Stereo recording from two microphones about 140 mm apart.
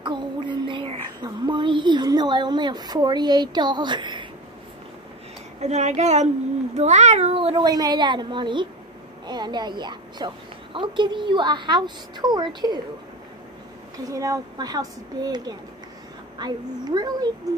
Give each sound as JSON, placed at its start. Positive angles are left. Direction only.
{"t": 0.0, "sound": "a sound", "side_deg": -35}
{"t": 5.6, "sound": "a woman's voice", "side_deg": -55}
{"t": 14.1, "sound": "speech", "side_deg": -25}